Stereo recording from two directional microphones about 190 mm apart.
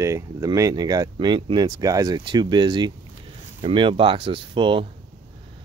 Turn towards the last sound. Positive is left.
turn(degrees=-25)  # may be behind; listen again after turning